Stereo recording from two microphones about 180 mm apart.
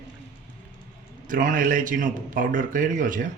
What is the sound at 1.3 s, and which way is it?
A man's voice, 50° right (ahead or behind).